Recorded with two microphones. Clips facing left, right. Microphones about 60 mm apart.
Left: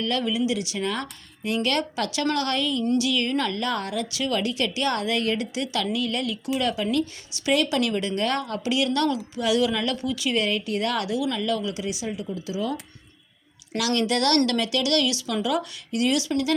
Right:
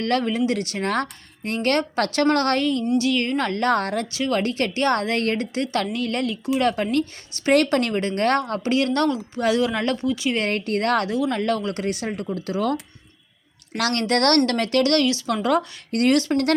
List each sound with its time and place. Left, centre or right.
0.0 s speech: right
4.1 s speech: right
6.6 s speech: right
10.4 s speech: right
13.7 s speech: right